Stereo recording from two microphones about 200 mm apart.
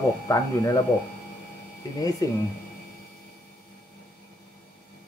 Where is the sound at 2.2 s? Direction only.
20° left (ahead or behind).